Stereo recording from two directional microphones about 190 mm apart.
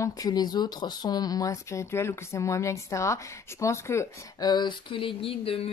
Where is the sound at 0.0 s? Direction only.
20° left (ahead or behind).